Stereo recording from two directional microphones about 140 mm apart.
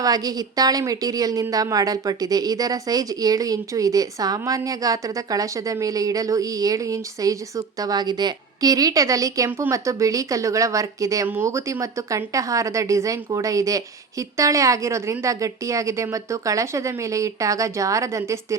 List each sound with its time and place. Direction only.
0.0 s a woman's voice: 25° right (ahead or behind)